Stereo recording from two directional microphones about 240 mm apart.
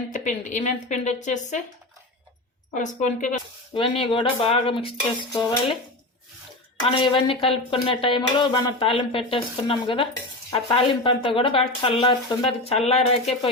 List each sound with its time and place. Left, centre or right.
0.1 s a woman's voice: left
2.7 s a woman's voice: left
6.8 s a woman's voice: left